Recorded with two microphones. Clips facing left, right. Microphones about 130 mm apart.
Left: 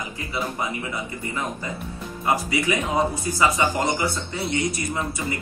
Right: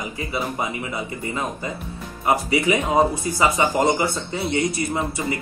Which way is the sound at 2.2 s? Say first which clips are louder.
Right 3 dB; 20° right (ahead or behind).